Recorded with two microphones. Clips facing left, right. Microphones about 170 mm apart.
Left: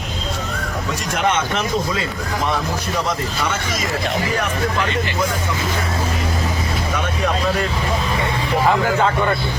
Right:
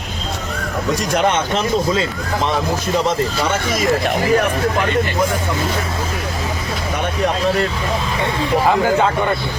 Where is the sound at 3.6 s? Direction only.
55° right (ahead or behind).